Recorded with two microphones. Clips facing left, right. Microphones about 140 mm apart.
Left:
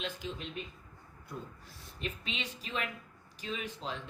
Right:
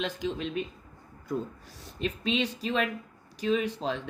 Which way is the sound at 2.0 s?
90° right.